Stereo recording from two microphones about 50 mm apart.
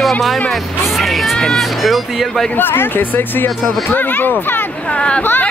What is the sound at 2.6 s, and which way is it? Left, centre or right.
Speech, left.